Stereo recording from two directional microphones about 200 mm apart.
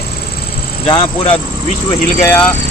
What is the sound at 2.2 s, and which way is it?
Speech, 15° left (ahead or behind).